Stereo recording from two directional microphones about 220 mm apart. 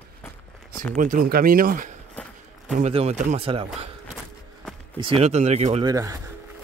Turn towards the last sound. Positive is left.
turn(degrees=-15)  # may be behind; listen again after turning